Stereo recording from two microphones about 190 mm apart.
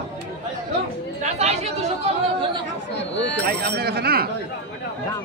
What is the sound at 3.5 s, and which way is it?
Speech, 55° right (ahead or behind).